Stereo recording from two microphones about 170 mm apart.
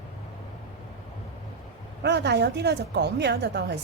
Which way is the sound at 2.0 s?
90° right.